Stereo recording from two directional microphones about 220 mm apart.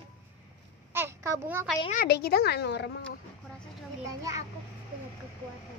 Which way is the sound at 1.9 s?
45° left (ahead or behind).